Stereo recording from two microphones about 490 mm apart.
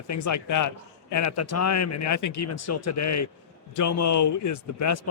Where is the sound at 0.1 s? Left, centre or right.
Left.